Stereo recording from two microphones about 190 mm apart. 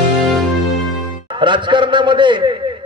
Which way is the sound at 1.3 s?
25° right (ahead or behind).